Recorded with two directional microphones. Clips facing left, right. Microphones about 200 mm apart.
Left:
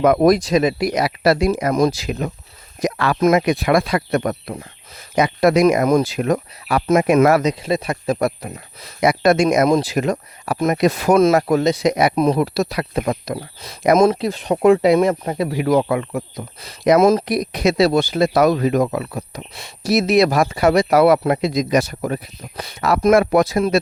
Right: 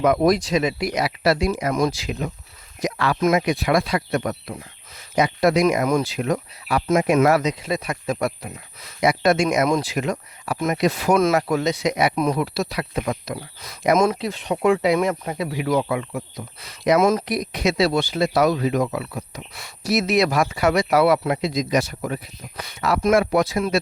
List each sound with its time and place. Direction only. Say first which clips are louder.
0.0 s speech: left 4 dB; 50° left (ahead or behind)
5.1 s speech: left 3 dB; 60° left (ahead or behind)
7.6 s speech: left 5 dB; 30° left (ahead or behind)
12.4 s speech: left 5 dB; 45° left (ahead or behind)
16.6 s speech: left 4 dB; 35° left (ahead or behind)
19.5 s speech: left 4 dB; 30° left (ahead or behind)